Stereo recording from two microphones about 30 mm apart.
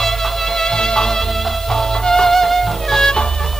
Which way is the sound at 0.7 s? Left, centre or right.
Left.